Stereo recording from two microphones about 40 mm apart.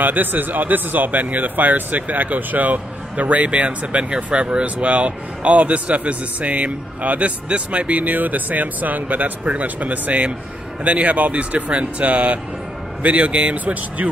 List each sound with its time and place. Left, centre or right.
0.0 s speech: right